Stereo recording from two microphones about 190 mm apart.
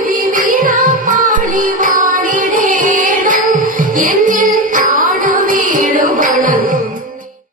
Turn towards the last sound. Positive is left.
turn(degrees=-45)  # may be behind; listen again after turning